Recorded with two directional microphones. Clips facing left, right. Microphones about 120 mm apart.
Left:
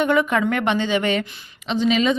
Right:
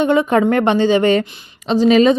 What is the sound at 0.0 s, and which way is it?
A woman's voice, 25° right (ahead or behind).